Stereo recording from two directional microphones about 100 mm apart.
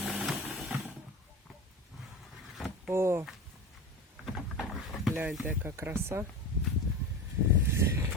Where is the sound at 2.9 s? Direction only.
25° right (ahead or behind).